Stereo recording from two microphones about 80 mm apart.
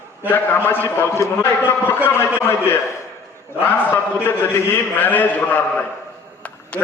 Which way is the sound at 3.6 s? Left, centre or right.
Left.